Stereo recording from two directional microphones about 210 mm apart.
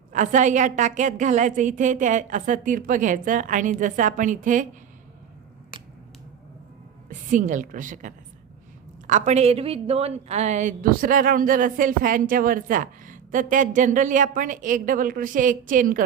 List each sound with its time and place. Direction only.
0.1 s a woman's voice: 35° right (ahead or behind)
7.1 s a woman's voice: 40° right (ahead or behind)